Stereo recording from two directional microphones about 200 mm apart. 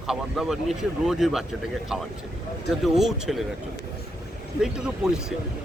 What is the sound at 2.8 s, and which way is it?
Speech, centre (ahead or behind).